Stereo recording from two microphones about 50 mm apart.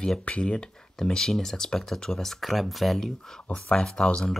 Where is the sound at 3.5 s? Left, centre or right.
Centre.